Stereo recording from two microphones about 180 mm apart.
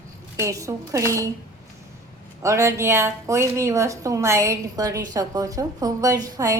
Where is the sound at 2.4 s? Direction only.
15° right (ahead or behind).